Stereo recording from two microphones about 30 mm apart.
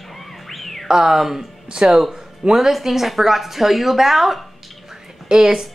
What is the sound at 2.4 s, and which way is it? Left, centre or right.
A woman's voice, centre.